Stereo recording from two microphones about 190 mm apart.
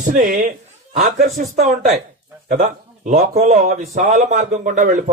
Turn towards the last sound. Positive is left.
turn(degrees=-40)  # may be behind; listen again after turning